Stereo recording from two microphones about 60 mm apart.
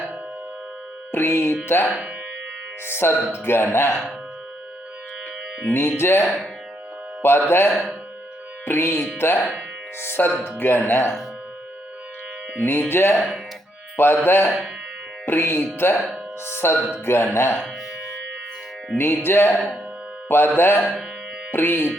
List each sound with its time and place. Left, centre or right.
1.1 s music: left
6.0 s music: left
12.5 s music: left
13.9 s speech: left
14.3 s music: left
16.0 s speech: centre
16.5 s music: left
18.9 s music: left
20.2 s speech: left
20.6 s music: left